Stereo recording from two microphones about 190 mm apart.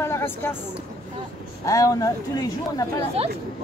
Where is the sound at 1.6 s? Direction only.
15° left (ahead or behind).